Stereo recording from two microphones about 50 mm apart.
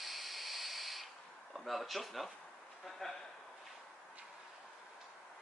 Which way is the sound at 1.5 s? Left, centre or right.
Centre.